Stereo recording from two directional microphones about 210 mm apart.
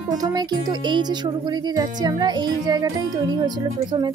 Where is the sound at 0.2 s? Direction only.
20° right (ahead or behind).